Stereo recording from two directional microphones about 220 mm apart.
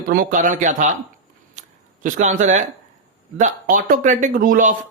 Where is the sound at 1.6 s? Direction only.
30° right (ahead or behind).